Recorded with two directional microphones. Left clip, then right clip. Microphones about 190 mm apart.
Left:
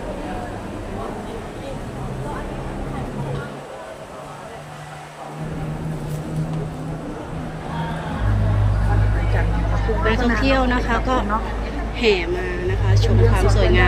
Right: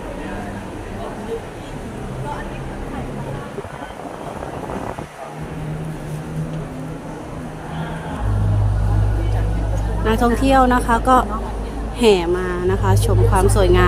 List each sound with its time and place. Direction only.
10.1 s a woman's voice: 25° right (ahead or behind)